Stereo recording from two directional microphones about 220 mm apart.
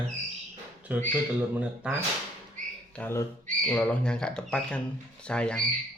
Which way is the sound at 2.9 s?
10° left (ahead or behind).